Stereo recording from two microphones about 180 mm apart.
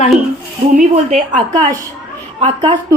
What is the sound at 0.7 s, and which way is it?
Speech, 45° right (ahead or behind).